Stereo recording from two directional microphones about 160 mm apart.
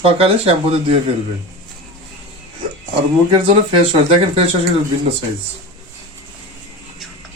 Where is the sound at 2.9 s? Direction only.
30° right (ahead or behind).